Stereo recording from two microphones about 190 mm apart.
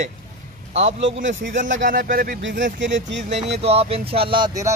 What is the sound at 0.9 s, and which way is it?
Speech, 75° right (ahead or behind).